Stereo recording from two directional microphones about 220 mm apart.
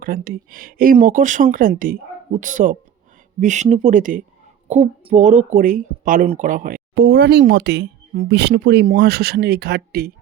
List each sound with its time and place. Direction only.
0.0 s speech: 40° right (ahead or behind)